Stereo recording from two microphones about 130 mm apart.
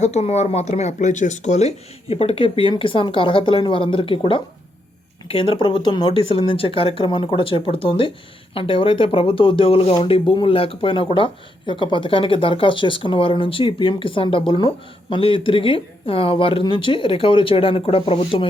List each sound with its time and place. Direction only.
0.0 s speech: 60° left (ahead or behind)